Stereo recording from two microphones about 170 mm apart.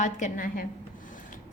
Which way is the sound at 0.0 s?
50° left (ahead or behind).